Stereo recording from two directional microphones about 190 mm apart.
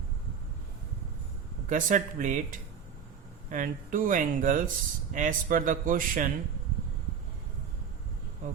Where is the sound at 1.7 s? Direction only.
45° right (ahead or behind).